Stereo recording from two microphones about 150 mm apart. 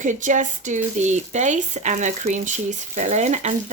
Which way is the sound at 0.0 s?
60° right (ahead or behind).